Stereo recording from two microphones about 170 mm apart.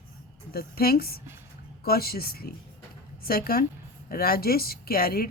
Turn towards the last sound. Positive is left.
turn(degrees=65)  # may be behind; listen again after turning